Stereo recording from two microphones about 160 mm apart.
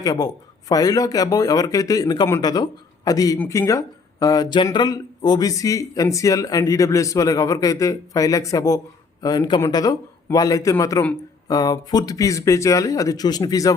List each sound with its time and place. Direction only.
0.0 s speech: 20° left (ahead or behind)
3.3 s speech: 10° left (ahead or behind)